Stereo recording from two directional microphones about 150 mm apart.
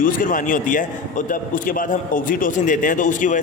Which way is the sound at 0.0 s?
65° left (ahead or behind).